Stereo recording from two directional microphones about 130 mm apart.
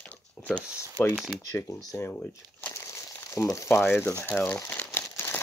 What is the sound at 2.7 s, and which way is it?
Crumpling, 20° left (ahead or behind).